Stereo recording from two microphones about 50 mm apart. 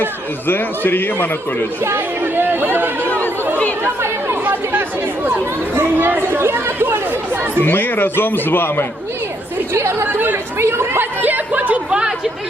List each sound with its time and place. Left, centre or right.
0.0 s a man's voice: left
1.8 s speech: right
5.2 s speech: right
7.6 s a man's voice: left
10.6 s speech: right
11.2 s speech: right
11.9 s speech: centre